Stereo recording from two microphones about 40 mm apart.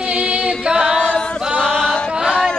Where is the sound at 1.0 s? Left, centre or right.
Left.